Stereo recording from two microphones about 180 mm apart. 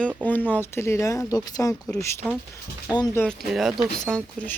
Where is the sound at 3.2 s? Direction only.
Centre (ahead or behind).